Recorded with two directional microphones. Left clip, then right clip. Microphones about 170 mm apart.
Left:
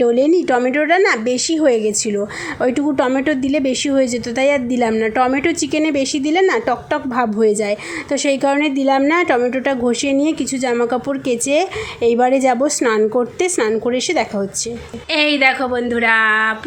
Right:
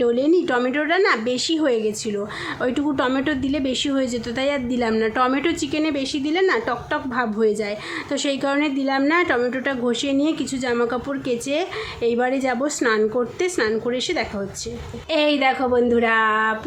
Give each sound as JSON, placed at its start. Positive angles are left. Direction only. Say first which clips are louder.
{"t": 0.0, "sound": "speech", "louder": "left 5 dB", "side_deg": 25}
{"t": 15.1, "sound": "a woman's voice", "louder": "left 4 dB", "side_deg": -5}